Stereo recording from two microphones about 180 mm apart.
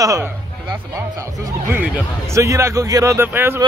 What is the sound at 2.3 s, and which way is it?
A man's voice, 15° right (ahead or behind).